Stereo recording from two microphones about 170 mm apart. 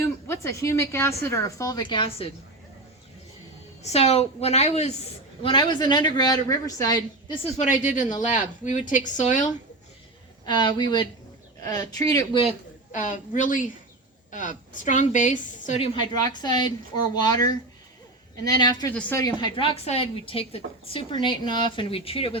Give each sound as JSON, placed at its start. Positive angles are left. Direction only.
{"t": 0.0, "sound": "a woman's voice", "side_deg": 15}
{"t": 3.8, "sound": "a woman's voice", "side_deg": 40}
{"t": 5.4, "sound": "a woman's voice", "side_deg": 30}
{"t": 7.4, "sound": "a woman's voice", "side_deg": 40}
{"t": 10.4, "sound": "a woman's voice", "side_deg": 25}
{"t": 12.9, "sound": "a woman's voice", "side_deg": 50}
{"t": 16.1, "sound": "a woman's voice", "side_deg": 25}
{"t": 18.9, "sound": "a woman's voice", "side_deg": 10}
{"t": 19.2, "sound": "a woman's voice", "side_deg": 30}